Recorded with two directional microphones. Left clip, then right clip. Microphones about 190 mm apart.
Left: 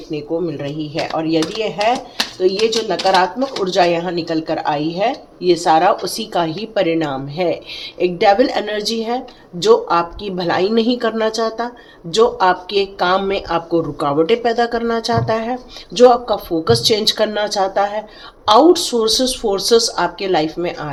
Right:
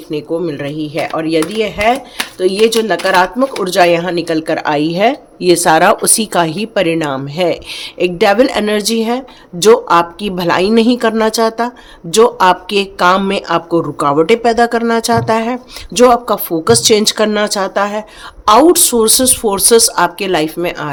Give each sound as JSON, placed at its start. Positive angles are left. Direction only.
{"t": 0.1, "sound": "speech", "side_deg": -50}